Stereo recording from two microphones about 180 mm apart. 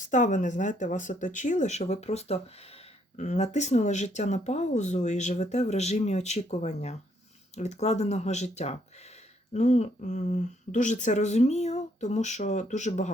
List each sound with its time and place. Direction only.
0.1 s speech: 45° left (ahead or behind)